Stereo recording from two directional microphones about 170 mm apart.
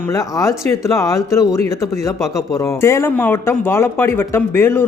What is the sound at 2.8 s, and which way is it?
A man's voice, 15° left (ahead or behind).